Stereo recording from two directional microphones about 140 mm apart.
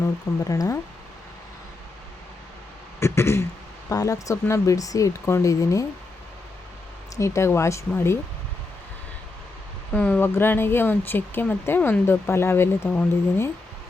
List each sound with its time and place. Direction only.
0.0 s speech: 25° left (ahead or behind)
3.0 s a sound: 20° left (ahead or behind)
3.8 s speech: 25° left (ahead or behind)
7.2 s speech: 20° left (ahead or behind)
9.9 s speech: 10° left (ahead or behind)